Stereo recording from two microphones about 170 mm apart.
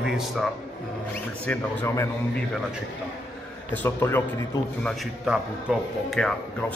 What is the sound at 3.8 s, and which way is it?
Speech, 15° left (ahead or behind).